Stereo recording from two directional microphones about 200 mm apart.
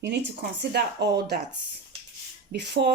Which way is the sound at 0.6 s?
55° right (ahead or behind).